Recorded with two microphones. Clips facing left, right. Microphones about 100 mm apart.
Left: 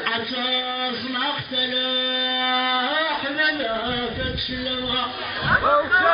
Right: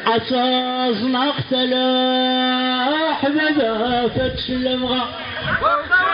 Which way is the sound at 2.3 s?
20° right (ahead or behind).